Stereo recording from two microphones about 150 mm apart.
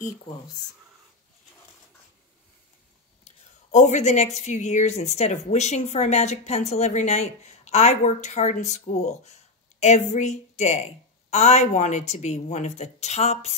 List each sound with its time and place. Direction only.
3.3 s speech: 50° left (ahead or behind)